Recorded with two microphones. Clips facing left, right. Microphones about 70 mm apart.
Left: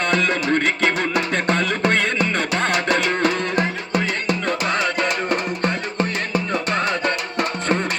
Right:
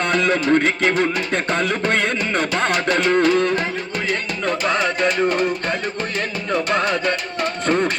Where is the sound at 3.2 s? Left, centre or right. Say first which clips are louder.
Right 3 dB; left.